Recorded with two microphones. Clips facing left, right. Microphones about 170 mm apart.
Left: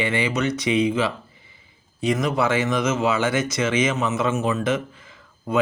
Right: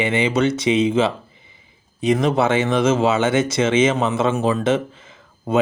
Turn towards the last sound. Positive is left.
turn(degrees=-25)  # may be behind; listen again after turning